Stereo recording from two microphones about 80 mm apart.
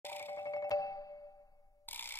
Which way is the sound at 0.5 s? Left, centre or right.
Left.